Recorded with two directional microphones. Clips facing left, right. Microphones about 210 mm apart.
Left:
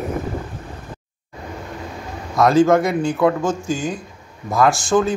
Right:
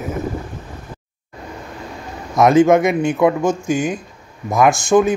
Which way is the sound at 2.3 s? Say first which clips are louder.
Right 2 dB; 20° right (ahead or behind).